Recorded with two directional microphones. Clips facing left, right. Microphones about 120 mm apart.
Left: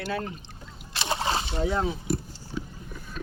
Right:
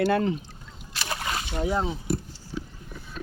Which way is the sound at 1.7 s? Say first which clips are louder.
Right 1 dB; 25° right (ahead or behind).